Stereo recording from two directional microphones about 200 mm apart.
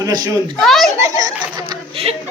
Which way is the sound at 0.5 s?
Centre (ahead or behind).